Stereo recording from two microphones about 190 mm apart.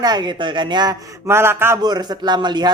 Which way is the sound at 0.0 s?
25° right (ahead or behind).